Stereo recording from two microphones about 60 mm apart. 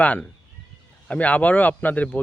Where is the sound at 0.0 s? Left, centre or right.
Left.